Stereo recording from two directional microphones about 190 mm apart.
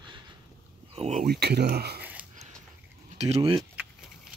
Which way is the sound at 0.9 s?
35° right (ahead or behind).